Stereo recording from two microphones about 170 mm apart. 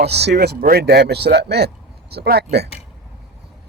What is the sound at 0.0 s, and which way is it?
Speech, 80° right.